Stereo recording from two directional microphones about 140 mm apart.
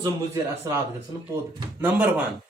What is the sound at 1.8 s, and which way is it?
Speech, 10° right (ahead or behind).